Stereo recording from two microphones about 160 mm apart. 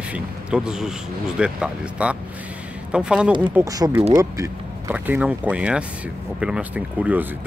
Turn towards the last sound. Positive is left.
turn(degrees=-10)  # may be behind; listen again after turning